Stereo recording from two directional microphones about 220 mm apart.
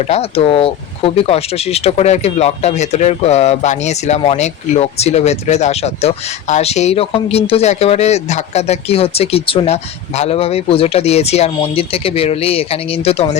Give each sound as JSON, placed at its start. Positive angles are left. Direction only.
{"t": 0.0, "sound": "speech", "side_deg": 30}